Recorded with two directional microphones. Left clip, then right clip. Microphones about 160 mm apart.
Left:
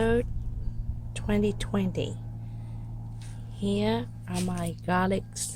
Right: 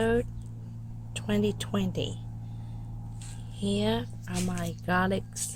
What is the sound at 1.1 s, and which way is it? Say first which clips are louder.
A woman's voice: left 1 dB; 10° left (ahead or behind).